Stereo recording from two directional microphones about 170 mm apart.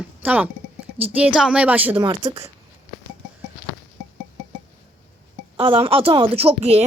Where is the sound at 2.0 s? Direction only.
25° right (ahead or behind).